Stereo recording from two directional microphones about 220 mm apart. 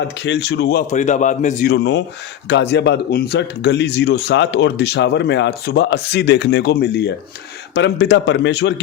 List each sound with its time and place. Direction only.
0.2 s speech: 50° left (ahead or behind)
0.9 s a man's voice: 35° left (ahead or behind)
1.7 s speech: 50° left (ahead or behind)